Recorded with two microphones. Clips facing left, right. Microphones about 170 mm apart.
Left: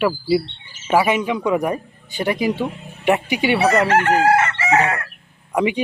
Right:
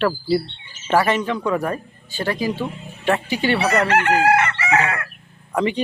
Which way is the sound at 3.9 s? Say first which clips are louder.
Left 1 dB; 40° left (ahead or behind).